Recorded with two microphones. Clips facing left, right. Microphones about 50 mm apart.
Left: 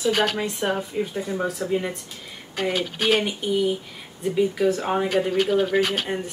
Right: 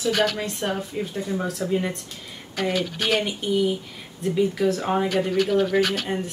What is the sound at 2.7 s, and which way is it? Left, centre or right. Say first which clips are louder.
Speech: left 2 dB; left.